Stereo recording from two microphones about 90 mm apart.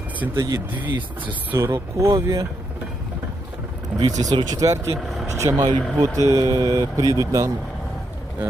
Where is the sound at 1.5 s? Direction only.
30° right (ahead or behind).